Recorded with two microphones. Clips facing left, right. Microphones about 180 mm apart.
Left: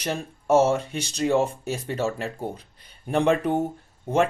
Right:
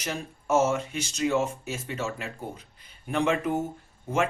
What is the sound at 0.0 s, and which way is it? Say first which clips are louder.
Speech: left 4 dB; 35° left (ahead or behind).